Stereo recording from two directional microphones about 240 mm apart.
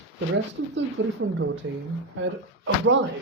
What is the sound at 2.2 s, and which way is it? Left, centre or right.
Speech, right.